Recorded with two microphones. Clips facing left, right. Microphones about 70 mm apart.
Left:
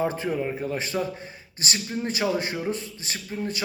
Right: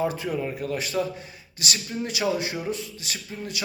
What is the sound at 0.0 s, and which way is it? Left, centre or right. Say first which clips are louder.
A man's voice: left 1 dB; left.